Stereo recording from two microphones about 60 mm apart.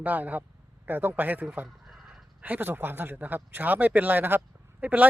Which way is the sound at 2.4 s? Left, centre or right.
Right.